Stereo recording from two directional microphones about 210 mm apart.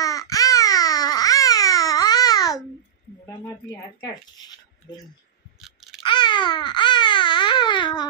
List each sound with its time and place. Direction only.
0.0 s babbling: 15° left (ahead or behind)
3.3 s speech: 15° left (ahead or behind)
5.6 s a sound: centre (ahead or behind)
6.0 s baby cry: 20° left (ahead or behind)